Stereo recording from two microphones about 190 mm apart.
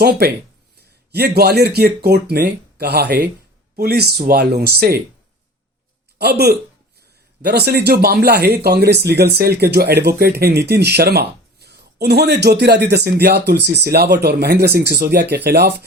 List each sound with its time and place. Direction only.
0.0 s speech: 55° right (ahead or behind)
6.1 s speech: 55° right (ahead or behind)